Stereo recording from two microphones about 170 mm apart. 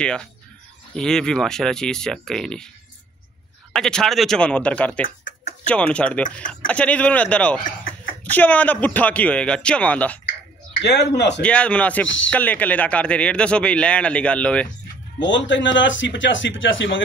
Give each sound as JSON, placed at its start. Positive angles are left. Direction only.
{"t": 0.0, "sound": "speech", "side_deg": 5}
{"t": 3.7, "sound": "speech", "side_deg": 5}
{"t": 10.8, "sound": "speech", "side_deg": 80}
{"t": 11.4, "sound": "speech", "side_deg": 5}
{"t": 15.1, "sound": "speech", "side_deg": 90}